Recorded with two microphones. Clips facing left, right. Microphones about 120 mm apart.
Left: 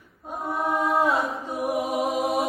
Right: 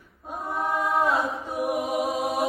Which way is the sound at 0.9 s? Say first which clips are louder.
Even; centre (ahead or behind).